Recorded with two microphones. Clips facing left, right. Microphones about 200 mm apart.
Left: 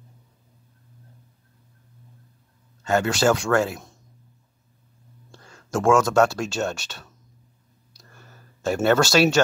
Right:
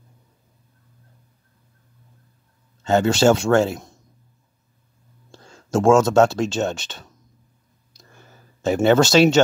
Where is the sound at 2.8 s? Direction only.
25° right (ahead or behind).